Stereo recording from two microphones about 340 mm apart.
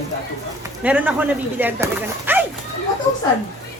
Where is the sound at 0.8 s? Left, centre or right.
Centre.